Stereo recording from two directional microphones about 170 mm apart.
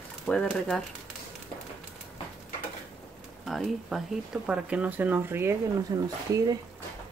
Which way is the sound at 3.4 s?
Centre (ahead or behind).